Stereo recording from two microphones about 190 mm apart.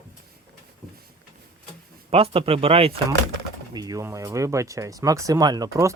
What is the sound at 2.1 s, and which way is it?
Speech, 30° right (ahead or behind).